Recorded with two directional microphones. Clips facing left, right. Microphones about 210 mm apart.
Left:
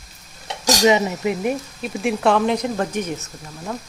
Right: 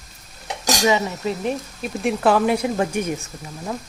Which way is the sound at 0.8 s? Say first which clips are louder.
Left 3 dB; 20° left (ahead or behind).